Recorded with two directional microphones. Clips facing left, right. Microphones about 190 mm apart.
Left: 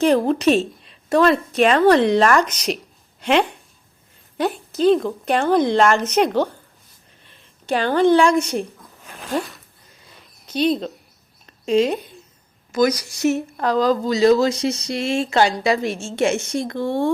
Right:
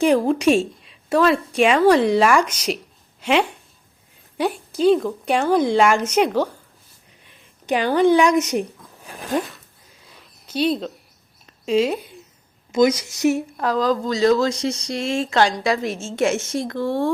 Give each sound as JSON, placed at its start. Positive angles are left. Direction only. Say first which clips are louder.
{"t": 0.2, "sound": "a woman's voice", "louder": "even", "side_deg": -10}
{"t": 3.2, "sound": "a sound", "louder": "left 1 dB", "side_deg": -5}
{"t": 4.4, "sound": "a woman's voice", "louder": "left 1 dB", "side_deg": -10}
{"t": 9.0, "sound": "a sound", "louder": "right 1 dB", "side_deg": -15}
{"t": 12.7, "sound": "a woman's voice", "louder": "right 1 dB", "side_deg": -25}
{"t": 13.6, "sound": "speech", "louder": "left 2 dB", "side_deg": 0}